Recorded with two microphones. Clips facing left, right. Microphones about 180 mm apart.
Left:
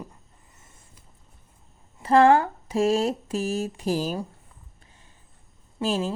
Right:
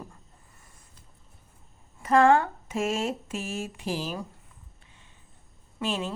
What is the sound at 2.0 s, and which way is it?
A woman's voice, 35° left (ahead or behind).